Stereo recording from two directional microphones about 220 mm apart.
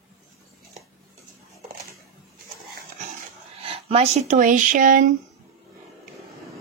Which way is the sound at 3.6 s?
25° right (ahead or behind).